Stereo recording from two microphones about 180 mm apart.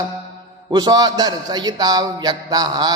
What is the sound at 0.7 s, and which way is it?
A man's voice, 20° right (ahead or behind).